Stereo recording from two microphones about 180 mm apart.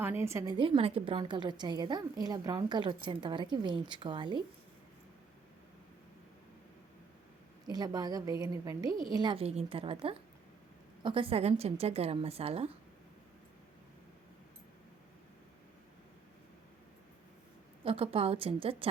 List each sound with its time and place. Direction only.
0.0 s a woman's voice: 15° right (ahead or behind)
7.7 s a woman's voice: 20° right (ahead or behind)
17.8 s a woman's voice: 30° right (ahead or behind)